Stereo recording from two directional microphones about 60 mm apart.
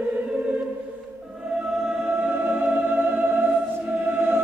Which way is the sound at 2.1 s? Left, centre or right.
Right.